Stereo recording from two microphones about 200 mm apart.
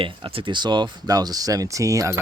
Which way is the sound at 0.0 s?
25° right (ahead or behind).